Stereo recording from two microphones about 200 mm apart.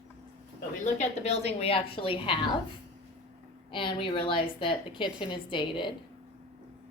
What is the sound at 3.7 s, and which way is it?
A woman's voice, 25° left (ahead or behind).